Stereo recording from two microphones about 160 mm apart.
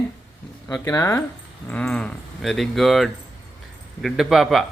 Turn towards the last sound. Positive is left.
turn(degrees=0)  # may be behind; listen again after turning